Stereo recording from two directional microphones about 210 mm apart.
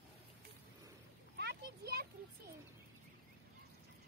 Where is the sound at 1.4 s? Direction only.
50° right (ahead or behind).